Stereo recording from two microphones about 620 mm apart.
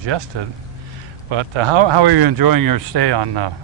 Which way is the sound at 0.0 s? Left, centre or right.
Right.